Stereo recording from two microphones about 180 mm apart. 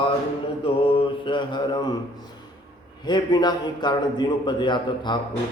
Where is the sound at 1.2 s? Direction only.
25° left (ahead or behind).